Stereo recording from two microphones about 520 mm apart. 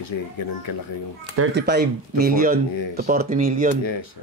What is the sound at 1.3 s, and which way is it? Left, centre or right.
A man's voice, right.